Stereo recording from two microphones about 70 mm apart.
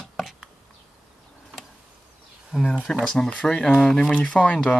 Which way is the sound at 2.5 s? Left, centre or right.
Centre.